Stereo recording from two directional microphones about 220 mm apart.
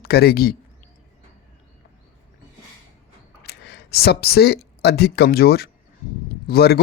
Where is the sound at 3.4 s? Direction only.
50° left (ahead or behind).